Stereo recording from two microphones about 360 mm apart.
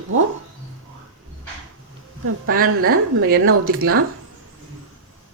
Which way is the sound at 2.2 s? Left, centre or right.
Right.